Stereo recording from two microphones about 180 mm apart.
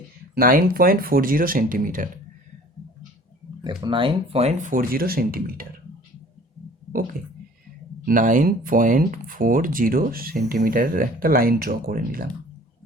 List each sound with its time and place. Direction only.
0.3 s speech: 55° right (ahead or behind)
3.6 s speech: 25° right (ahead or behind); by 5.6 s 55° right (ahead or behind)
8.0 s speech: 45° right (ahead or behind)